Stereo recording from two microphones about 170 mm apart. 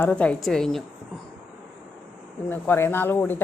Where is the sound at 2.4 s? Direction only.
10° left (ahead or behind).